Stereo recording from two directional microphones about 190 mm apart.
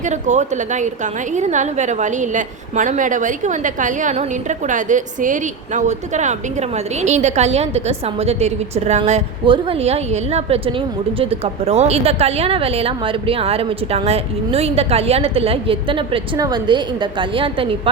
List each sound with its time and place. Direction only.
0.0 s a woman's voice: 40° right (ahead or behind)